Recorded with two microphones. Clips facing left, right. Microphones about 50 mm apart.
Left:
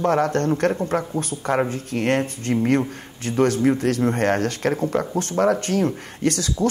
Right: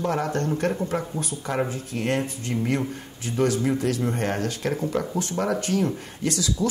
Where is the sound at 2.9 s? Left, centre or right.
Left.